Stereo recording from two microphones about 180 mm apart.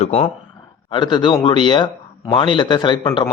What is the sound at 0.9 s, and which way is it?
Speech, 25° left (ahead or behind).